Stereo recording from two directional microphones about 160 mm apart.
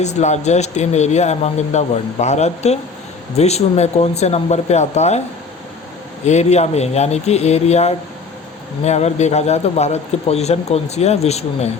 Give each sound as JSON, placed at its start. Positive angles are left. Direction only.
{"t": 0.0, "sound": "a man's voice", "side_deg": 45}
{"t": 6.2, "sound": "a man's voice", "side_deg": 45}